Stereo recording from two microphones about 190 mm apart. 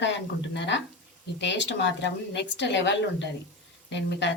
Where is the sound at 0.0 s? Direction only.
65° left (ahead or behind).